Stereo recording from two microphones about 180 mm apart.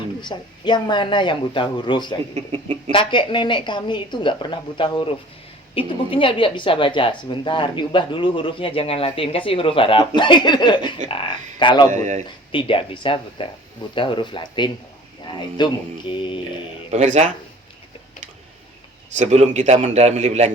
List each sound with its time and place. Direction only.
0.2 s a woman's voice: 25° left (ahead or behind)
2.3 s a man's voice: 35° right (ahead or behind)
2.9 s a woman's voice: 25° left (ahead or behind)
11.9 s a man's voice: 40° right (ahead or behind)
12.5 s a woman's voice: 30° left (ahead or behind)
16.9 s a man's voice: 40° right (ahead or behind)
19.1 s a man's voice: 40° right (ahead or behind)